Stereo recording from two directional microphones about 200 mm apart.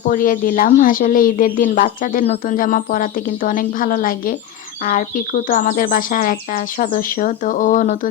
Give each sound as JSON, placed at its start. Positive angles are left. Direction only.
{"t": 0.1, "sound": "speech", "side_deg": 45}